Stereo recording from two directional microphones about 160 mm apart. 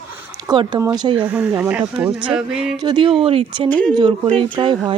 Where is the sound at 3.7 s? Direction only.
10° left (ahead or behind).